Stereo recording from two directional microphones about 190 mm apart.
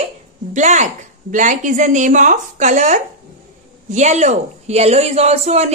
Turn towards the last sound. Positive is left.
turn(degrees=-35)  # may be behind; listen again after turning